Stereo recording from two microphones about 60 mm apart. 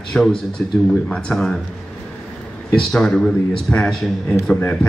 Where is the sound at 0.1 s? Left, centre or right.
Centre.